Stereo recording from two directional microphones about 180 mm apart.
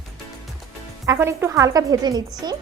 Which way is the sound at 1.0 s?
15° right (ahead or behind).